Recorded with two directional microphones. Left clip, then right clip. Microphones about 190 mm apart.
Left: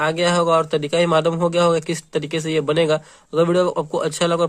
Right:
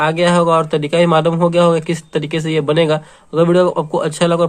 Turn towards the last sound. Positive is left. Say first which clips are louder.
# right 4 dB
turn(degrees=25)  # may be behind; listen again after turning